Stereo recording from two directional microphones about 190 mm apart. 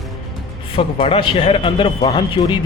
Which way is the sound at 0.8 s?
30° left (ahead or behind).